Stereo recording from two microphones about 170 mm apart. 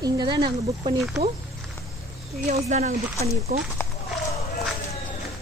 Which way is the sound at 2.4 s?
40° right (ahead or behind).